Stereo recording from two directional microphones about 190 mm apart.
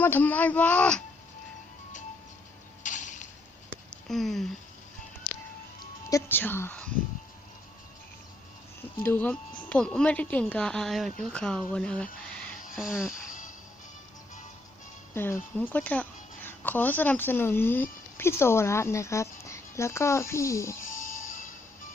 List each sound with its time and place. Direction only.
0.0 s speech: 10° left (ahead or behind)
2.8 s mechanisms: 40° left (ahead or behind)
4.1 s speech: centre (ahead or behind)
6.1 s a woman's voice: 15° left (ahead or behind)
9.0 s speech: 10° left (ahead or behind)
12.3 s a sound: 5° left (ahead or behind)
12.7 s speech: centre (ahead or behind)
15.1 s speech: 10° left (ahead or behind)